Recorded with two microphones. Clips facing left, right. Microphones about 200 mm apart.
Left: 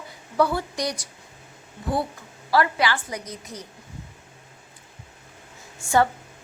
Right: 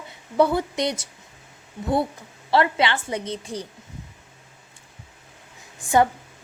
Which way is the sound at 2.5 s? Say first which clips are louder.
Right 1 dB; 25° right (ahead or behind).